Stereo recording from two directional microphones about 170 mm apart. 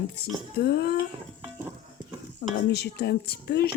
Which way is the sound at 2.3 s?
75° left (ahead or behind).